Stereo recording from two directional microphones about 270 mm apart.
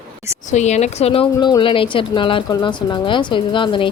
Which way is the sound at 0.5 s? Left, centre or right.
Left.